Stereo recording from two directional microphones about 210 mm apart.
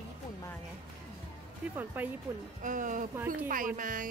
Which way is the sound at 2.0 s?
10° right (ahead or behind).